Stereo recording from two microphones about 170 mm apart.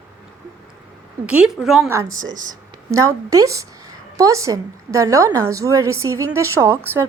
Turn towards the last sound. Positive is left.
turn(degrees=-15)  # may be behind; listen again after turning